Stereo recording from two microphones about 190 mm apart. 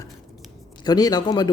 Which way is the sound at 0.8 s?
20° left (ahead or behind).